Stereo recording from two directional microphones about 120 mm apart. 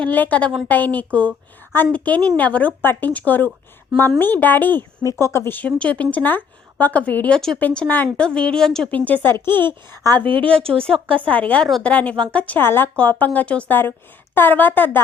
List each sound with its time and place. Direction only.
0.0 s a woman's voice: 15° left (ahead or behind)
10.2 s speech: 45° right (ahead or behind)
11.3 s a woman's voice: 10° left (ahead or behind)